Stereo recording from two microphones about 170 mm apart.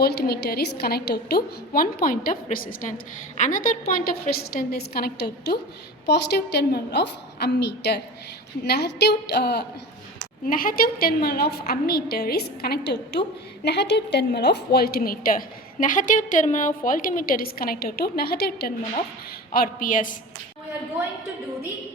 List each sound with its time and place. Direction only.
0.0 s a woman's voice: 70° left (ahead or behind)
6.1 s a woman's voice: 80° left
10.4 s a woman's voice: 55° left (ahead or behind)
19.5 s a woman's voice: 55° left (ahead or behind)